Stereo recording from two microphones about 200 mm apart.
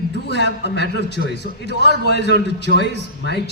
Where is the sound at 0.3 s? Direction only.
60° left (ahead or behind).